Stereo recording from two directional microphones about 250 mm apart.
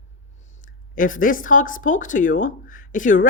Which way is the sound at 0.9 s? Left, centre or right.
Left.